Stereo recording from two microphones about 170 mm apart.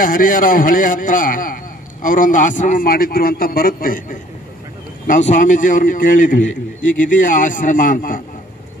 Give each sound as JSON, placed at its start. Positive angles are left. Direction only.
{"t": 0.0, "sound": "a man's voice", "side_deg": 55}